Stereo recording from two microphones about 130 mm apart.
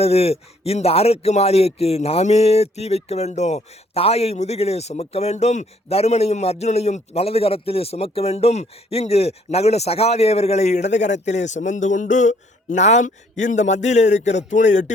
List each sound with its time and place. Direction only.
0.0 s speech: 50° left (ahead or behind); by 14.9 s 70° left (ahead or behind)